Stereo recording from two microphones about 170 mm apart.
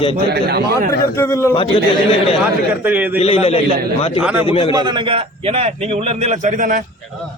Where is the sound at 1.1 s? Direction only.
15° left (ahead or behind).